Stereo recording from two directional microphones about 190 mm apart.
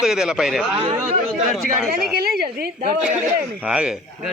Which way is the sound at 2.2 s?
55° right (ahead or behind).